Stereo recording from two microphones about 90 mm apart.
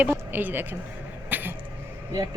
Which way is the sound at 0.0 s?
20° right (ahead or behind).